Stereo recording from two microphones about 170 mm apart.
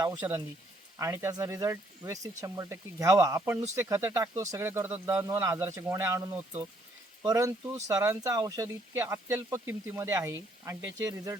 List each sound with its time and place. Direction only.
0.0 s speech: 25° right (ahead or behind)